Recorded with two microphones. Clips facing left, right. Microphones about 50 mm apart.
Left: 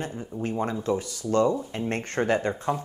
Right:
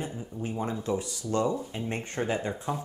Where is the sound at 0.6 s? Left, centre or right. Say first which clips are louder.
Left 3 dB; left.